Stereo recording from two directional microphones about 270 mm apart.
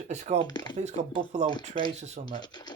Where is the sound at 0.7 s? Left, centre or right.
Right.